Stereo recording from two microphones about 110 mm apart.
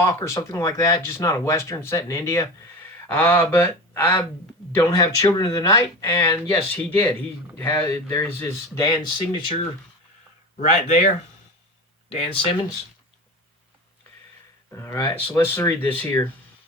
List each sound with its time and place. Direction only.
0.0 s speech: 30° left (ahead or behind)
4.9 s speech: 35° left (ahead or behind)
6.7 s speech: 15° left (ahead or behind)
8.7 s speech: 35° left (ahead or behind)
10.6 s speech: 85° left
12.0 s speech: 60° left (ahead or behind)
14.7 s speech: 30° left (ahead or behind)